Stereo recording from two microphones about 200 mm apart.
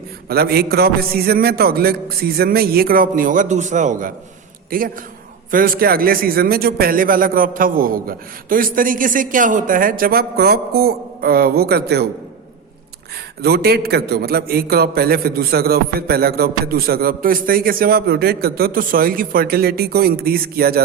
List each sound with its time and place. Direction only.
0.3 s a man's voice: 50° right (ahead or behind)
13.4 s a man's voice: 50° right (ahead or behind)